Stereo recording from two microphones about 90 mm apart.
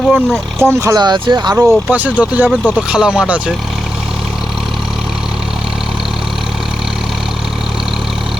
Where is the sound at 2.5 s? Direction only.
10° left (ahead or behind).